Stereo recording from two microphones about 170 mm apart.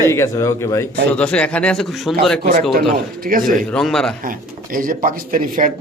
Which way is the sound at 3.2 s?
55° right (ahead or behind).